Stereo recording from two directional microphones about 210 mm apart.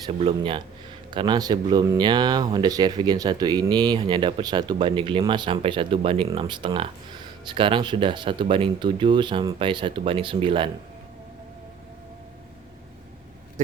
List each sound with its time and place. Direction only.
0.0 s speech: 25° right (ahead or behind)